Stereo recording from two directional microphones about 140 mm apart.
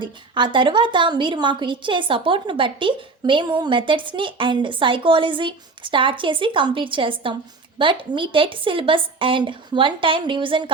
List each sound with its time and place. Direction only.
0.0 s a woman's voice: 35° right (ahead or behind)